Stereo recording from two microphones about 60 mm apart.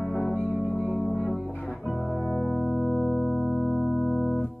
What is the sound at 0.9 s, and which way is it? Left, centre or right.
Music, centre.